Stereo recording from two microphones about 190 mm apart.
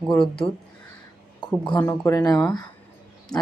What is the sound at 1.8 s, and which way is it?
Speech, 15° left (ahead or behind).